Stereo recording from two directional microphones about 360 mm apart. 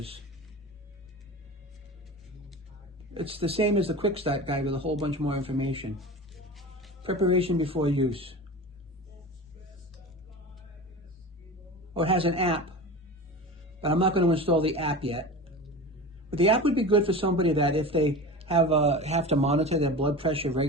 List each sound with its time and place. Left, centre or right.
3.2 s speech: centre
6.0 s music: centre
7.0 s speech: centre
11.9 s speech: centre
13.8 s speech: centre